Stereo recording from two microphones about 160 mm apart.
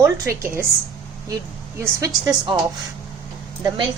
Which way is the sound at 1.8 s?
20° right (ahead or behind).